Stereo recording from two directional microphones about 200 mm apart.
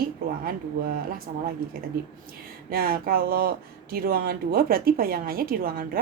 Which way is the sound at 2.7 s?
50° right (ahead or behind).